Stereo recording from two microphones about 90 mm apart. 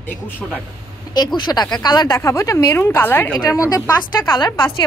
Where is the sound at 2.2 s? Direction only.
30° left (ahead or behind).